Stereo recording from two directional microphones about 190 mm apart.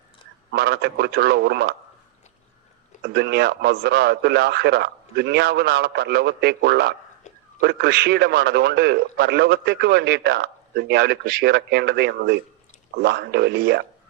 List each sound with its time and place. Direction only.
0.5 s a man's voice: 60° right (ahead or behind)
3.0 s a man's voice: 60° right (ahead or behind)